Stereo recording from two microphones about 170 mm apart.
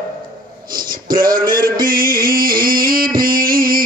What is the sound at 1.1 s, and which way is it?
Music, 55° right (ahead or behind).